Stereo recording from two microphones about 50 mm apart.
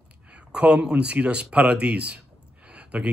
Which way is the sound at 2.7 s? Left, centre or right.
Right.